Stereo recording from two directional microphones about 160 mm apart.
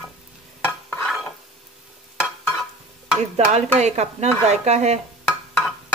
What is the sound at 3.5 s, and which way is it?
A woman's voice, 45° right (ahead or behind).